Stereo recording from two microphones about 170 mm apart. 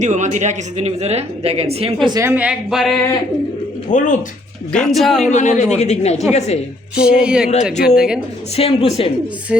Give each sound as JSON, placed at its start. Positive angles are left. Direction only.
{"t": 0.0, "sound": "speech", "side_deg": -45}
{"t": 2.0, "sound": "speech", "side_deg": -20}
{"t": 2.3, "sound": "speech", "side_deg": -5}
{"t": 3.8, "sound": "speech", "side_deg": 45}
{"t": 4.7, "sound": "speech", "side_deg": 5}
{"t": 5.2, "sound": "speech", "side_deg": 45}
{"t": 7.0, "sound": "speech", "side_deg": -5}
{"t": 8.5, "sound": "speech", "side_deg": 35}
{"t": 9.5, "sound": "speech", "side_deg": -5}